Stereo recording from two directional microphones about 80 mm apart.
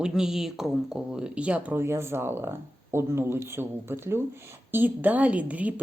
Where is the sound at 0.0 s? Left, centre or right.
Centre.